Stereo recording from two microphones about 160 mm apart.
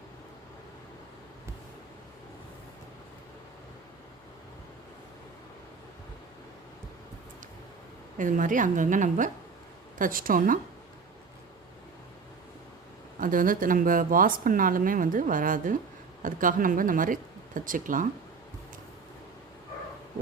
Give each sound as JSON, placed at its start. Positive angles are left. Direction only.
{"t": 8.2, "sound": "a woman's voice", "side_deg": -55}
{"t": 13.1, "sound": "speech", "side_deg": -60}